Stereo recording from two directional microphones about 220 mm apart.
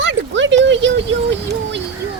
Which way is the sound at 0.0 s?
55° right (ahead or behind).